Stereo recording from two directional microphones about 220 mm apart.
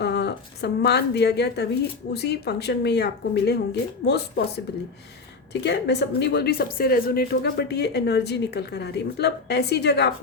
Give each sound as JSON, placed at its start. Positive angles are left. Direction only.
{"t": 0.0, "sound": "a woman's voice", "side_deg": 50}